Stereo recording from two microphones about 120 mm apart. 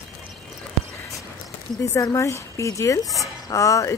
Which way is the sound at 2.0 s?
25° left (ahead or behind).